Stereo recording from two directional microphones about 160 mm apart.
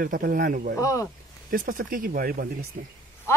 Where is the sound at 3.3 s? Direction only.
15° left (ahead or behind).